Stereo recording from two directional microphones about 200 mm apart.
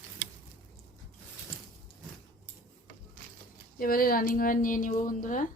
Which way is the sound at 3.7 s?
45° left (ahead or behind).